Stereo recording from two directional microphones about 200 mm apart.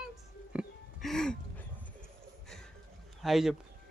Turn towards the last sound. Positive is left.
turn(degrees=0)  # may be behind; listen again after turning